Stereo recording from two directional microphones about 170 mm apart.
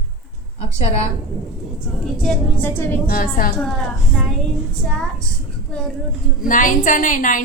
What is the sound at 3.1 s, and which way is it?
Speech, 60° left (ahead or behind).